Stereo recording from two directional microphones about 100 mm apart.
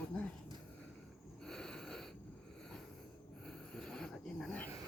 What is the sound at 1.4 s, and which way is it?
Snort, 5° left (ahead or behind).